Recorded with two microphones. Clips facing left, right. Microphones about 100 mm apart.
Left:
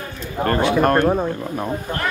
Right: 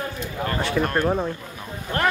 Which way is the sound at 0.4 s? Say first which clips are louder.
Left 7 dB; 35° left (ahead or behind).